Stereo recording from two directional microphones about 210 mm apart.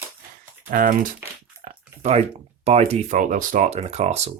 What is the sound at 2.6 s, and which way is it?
Speech, 30° right (ahead or behind).